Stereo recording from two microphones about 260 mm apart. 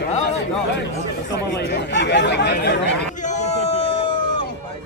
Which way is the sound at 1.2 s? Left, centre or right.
Left.